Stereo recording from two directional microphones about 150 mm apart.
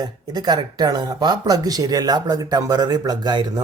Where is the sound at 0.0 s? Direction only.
25° right (ahead or behind).